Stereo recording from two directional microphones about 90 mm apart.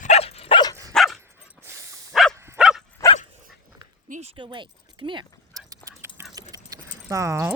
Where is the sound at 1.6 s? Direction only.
25° right (ahead or behind).